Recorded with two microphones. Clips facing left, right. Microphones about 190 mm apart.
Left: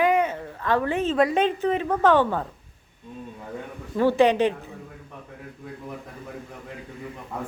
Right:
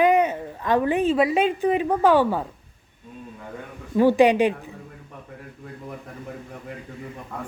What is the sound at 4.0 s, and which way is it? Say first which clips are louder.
Speech: right 2 dB; 15° right (ahead or behind).